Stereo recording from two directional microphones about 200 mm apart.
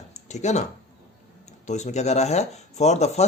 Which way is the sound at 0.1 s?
35° left (ahead or behind).